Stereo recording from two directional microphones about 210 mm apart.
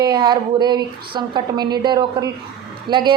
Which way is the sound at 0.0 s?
20° right (ahead or behind).